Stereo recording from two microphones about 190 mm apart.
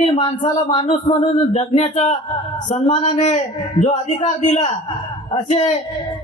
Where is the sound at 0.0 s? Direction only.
30° left (ahead or behind).